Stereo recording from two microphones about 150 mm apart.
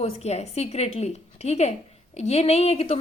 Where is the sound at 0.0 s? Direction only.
45° left (ahead or behind).